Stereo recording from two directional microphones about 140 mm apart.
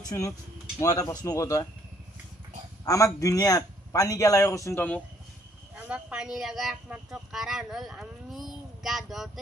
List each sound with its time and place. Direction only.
0.7 s a man's voice: 25° left (ahead or behind)
2.8 s a man's voice: 25° left (ahead or behind)
5.8 s speech: 10° right (ahead or behind)